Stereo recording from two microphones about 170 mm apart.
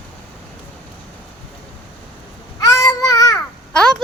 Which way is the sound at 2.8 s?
20° left (ahead or behind).